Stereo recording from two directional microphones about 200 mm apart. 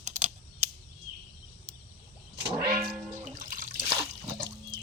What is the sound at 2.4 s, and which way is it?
Music, 50° right (ahead or behind).